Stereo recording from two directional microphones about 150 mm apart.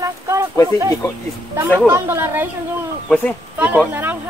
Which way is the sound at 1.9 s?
15° right (ahead or behind).